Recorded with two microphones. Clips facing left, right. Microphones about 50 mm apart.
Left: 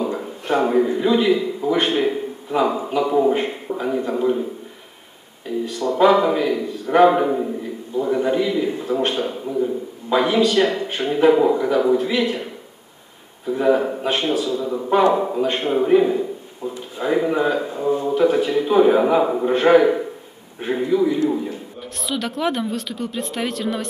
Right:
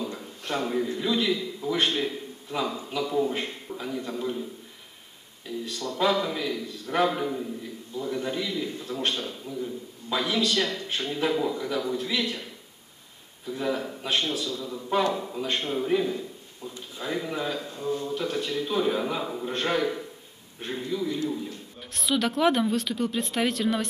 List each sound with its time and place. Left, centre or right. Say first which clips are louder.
0.5 s a man's voice: left 10 dB; left
5.5 s a man's voice: left 10 dB; left
13.5 s a man's voice: left 11 dB; left
21.9 s speech: even; centre